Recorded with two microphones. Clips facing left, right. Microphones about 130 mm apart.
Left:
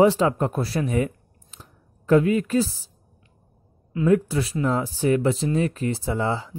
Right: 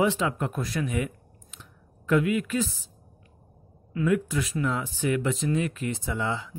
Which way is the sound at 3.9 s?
35° left (ahead or behind).